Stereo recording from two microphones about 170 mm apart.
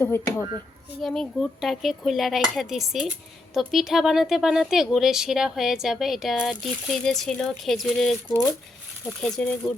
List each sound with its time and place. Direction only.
0.0 s speech: 15° left (ahead or behind)
1.0 s speech: centre (ahead or behind)
9.2 s speech: 5° left (ahead or behind)